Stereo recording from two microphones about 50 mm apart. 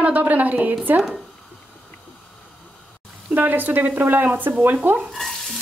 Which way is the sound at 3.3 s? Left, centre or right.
Right.